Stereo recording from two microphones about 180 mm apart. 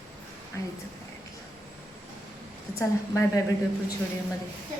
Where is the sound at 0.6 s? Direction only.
20° left (ahead or behind).